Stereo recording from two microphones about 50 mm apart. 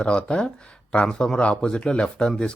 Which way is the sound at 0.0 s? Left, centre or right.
Left.